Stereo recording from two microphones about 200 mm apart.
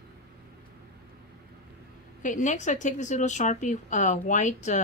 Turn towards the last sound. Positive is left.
turn(degrees=35)  # may be behind; listen again after turning